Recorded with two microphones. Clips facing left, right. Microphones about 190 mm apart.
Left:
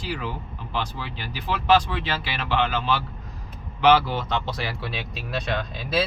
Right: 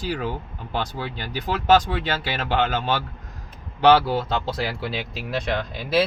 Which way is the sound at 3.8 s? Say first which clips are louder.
Right 2 dB; 30° right (ahead or behind).